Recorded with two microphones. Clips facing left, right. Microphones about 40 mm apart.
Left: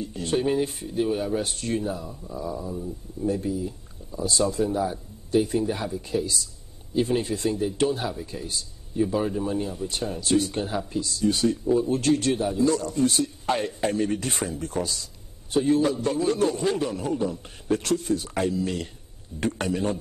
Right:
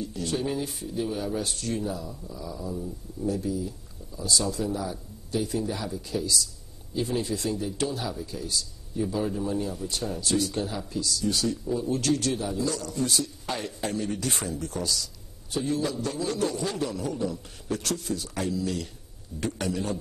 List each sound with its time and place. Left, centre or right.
0.0 s a man's voice: left
2.7 s speech: centre
3.3 s a man's voice: left
14.6 s a man's voice: left